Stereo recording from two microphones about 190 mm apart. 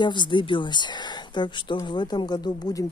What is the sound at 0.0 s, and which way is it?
Speech, 25° left (ahead or behind).